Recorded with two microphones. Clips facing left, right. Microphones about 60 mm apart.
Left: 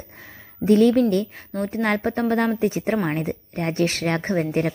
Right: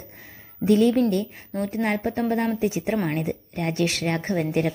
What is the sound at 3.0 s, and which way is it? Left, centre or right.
Speech, left.